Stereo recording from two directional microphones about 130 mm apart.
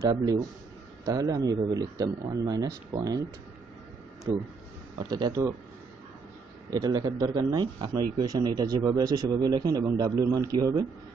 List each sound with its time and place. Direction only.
0.0 s a man's voice: 25° right (ahead or behind)
4.9 s speech: 35° right (ahead or behind)
6.7 s a man's voice: 30° right (ahead or behind)